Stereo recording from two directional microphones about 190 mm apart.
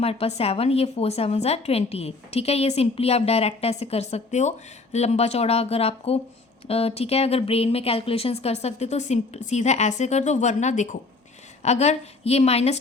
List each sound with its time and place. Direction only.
0.0 s a woman's voice: 30° left (ahead or behind)